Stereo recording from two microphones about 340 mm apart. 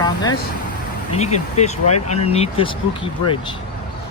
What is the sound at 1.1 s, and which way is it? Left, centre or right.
Speech, centre.